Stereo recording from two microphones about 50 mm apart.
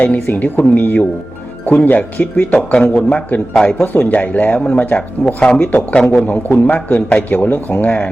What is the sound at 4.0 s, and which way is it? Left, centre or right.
A man's voice, left.